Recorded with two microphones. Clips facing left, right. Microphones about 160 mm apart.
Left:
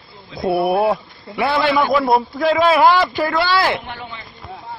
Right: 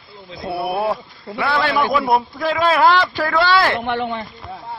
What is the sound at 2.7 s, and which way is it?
Speech, 10° left (ahead or behind).